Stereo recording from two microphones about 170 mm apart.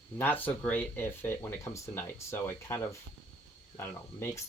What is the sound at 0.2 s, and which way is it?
Speech, 10° left (ahead or behind).